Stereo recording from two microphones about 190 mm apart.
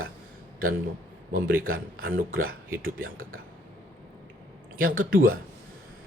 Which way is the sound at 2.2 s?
50° right (ahead or behind).